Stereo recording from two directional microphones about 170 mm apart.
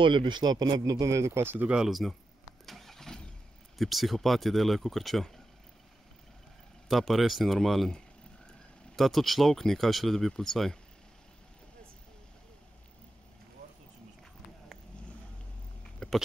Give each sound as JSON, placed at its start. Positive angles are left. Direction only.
{"t": 0.0, "sound": "speech", "side_deg": -30}
{"t": 2.6, "sound": "vehicle", "side_deg": 0}
{"t": 3.7, "sound": "speech", "side_deg": 0}
{"t": 6.9, "sound": "speech", "side_deg": 0}
{"t": 16.0, "sound": "a sound", "side_deg": 5}